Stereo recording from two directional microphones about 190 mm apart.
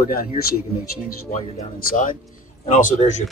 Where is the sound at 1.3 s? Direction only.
45° left (ahead or behind).